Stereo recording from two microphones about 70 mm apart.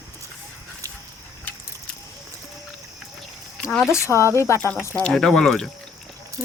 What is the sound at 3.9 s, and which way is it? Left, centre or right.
Speech, left.